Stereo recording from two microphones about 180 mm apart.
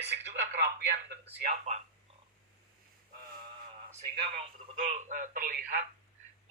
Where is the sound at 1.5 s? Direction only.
40° right (ahead or behind).